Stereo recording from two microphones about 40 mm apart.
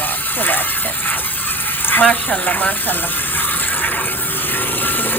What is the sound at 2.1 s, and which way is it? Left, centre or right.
Speech, left.